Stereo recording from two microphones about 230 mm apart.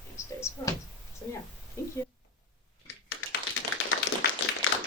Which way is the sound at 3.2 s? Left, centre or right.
Left.